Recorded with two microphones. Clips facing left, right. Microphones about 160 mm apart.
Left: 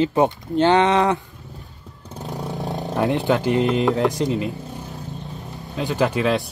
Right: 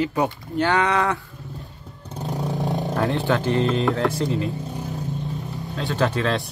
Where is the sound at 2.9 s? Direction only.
15° left (ahead or behind).